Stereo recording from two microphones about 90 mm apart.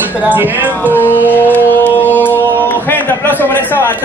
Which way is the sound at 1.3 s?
20° left (ahead or behind).